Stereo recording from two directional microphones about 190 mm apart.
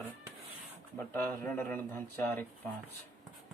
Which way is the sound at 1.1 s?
10° left (ahead or behind).